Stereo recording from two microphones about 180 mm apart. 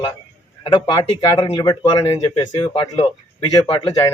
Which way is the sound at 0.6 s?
25° left (ahead or behind).